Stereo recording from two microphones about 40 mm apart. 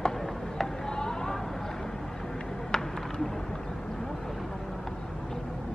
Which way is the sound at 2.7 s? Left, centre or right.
Centre.